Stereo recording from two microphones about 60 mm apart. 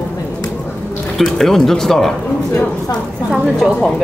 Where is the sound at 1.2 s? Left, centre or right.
Centre.